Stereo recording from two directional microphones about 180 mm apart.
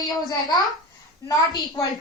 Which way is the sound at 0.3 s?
20° left (ahead or behind).